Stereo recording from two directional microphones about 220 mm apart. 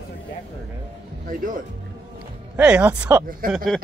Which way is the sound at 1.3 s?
40° right (ahead or behind).